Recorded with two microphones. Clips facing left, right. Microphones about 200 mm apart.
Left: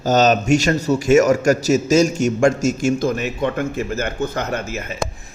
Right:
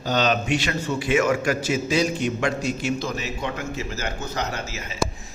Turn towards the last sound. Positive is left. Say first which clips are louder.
# left 6 dB
turn(degrees=55)  # may be behind; listen again after turning